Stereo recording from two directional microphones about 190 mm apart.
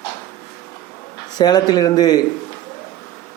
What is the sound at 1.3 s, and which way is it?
Speech, 20° left (ahead or behind).